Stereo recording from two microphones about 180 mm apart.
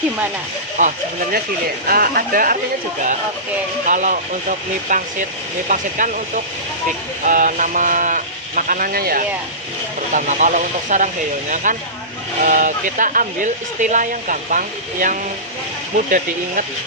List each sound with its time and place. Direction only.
0.8 s speech: 45° right (ahead or behind)
1.9 s speech: 55° right (ahead or behind)
3.8 s speech: 45° right (ahead or behind)
16.0 s speech: 45° right (ahead or behind)